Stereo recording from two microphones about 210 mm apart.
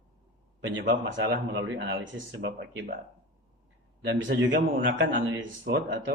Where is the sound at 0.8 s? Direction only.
50° right (ahead or behind).